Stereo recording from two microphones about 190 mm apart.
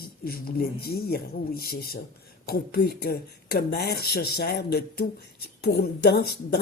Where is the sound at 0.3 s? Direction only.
50° left (ahead or behind).